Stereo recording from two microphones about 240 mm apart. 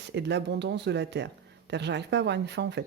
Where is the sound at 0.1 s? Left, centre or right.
Right.